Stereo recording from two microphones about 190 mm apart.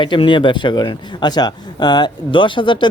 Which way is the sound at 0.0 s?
25° left (ahead or behind).